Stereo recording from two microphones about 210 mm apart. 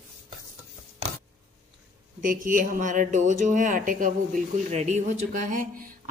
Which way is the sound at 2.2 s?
40° right (ahead or behind).